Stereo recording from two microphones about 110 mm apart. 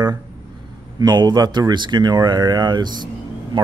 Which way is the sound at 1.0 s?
40° right (ahead or behind).